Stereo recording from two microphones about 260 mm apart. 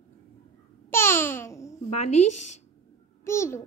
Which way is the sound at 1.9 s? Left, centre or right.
Left.